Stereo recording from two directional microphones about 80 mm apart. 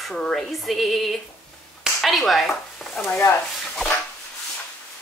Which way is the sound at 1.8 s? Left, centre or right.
Centre.